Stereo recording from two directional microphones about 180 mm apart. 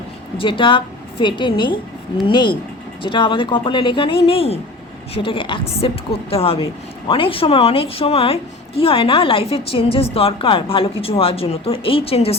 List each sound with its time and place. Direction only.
0.3 s a woman's voice: 30° left (ahead or behind)